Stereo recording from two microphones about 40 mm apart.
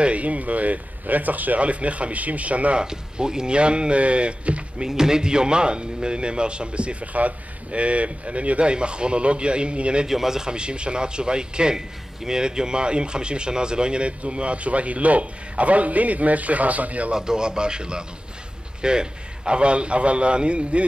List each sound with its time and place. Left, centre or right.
0.0 s speech: right
2.8 s a man's voice: centre
4.8 s a man's voice: centre
10.0 s a man's voice: centre; by 17.1 s right
17.1 s a man's voice: centre